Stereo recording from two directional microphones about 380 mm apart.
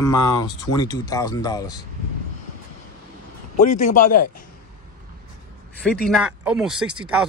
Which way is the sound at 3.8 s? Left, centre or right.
Left.